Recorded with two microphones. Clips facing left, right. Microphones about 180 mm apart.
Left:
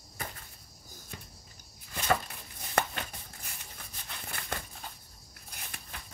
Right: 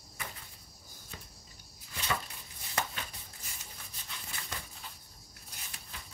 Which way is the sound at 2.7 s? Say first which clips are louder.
Left 6 dB; 60° left (ahead or behind).